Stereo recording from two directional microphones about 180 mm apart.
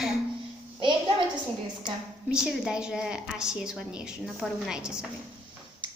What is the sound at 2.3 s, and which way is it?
A woman's voice, 5° right (ahead or behind).